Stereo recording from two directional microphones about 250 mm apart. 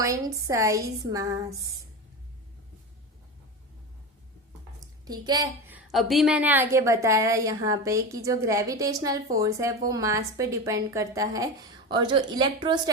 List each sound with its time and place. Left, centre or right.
0.0 s a woman's voice: centre
5.0 s a woman's voice: centre